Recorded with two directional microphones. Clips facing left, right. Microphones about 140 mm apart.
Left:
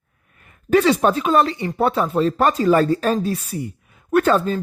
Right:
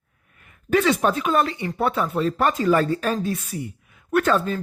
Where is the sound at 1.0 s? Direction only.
30° left (ahead or behind).